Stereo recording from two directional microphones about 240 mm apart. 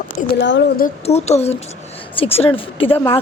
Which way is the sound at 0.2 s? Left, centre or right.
Left.